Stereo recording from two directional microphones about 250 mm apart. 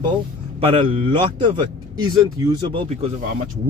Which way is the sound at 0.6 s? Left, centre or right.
Right.